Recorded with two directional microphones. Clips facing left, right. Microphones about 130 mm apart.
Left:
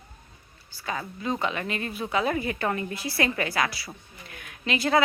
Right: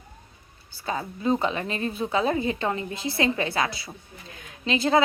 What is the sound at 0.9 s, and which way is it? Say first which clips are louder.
A woman's voice: right 5 dB; 30° right (ahead or behind).